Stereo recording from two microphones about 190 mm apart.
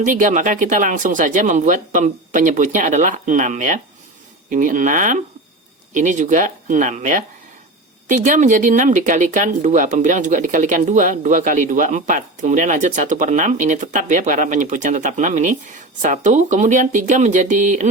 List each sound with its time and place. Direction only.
0.0 s speech: 40° right (ahead or behind)